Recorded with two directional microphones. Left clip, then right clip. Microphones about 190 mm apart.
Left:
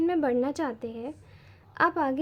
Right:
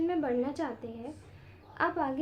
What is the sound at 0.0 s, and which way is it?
A woman's voice, 40° left (ahead or behind).